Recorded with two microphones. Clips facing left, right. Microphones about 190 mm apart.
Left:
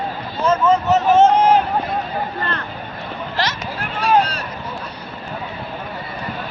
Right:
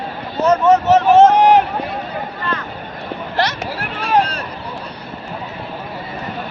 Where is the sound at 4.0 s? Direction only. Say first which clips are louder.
Even; 55° right (ahead or behind).